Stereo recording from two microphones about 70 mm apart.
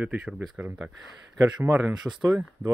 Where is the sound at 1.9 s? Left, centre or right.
Centre.